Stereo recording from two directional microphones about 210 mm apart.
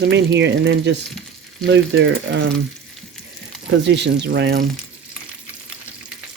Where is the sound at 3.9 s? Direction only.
55° right (ahead or behind).